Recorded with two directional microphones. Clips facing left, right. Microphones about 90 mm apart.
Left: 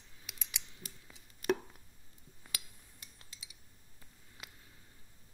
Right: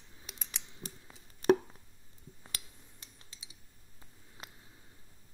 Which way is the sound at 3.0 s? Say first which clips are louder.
Left 2 dB; 25° right (ahead or behind).